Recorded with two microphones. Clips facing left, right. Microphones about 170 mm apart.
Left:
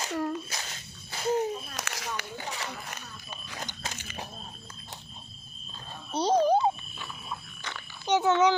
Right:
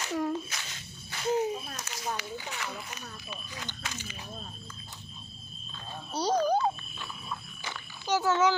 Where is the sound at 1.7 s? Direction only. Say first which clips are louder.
Even; 80° left.